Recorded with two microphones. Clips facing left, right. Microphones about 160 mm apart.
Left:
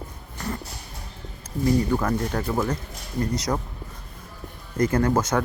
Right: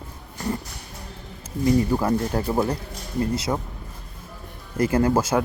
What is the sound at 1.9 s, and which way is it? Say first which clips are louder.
Speech: right 2 dB; 10° right (ahead or behind).